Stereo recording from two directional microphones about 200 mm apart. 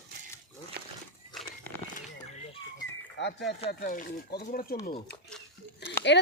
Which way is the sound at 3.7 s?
45° left (ahead or behind).